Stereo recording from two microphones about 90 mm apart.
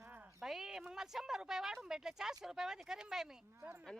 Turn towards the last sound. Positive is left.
turn(degrees=-25)  # may be behind; listen again after turning